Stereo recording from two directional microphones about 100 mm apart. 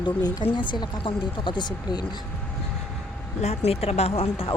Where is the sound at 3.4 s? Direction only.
90° left; by 4.5 s 70° left (ahead or behind).